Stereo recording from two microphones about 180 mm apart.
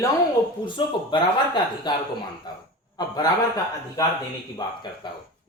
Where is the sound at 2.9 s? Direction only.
20° left (ahead or behind).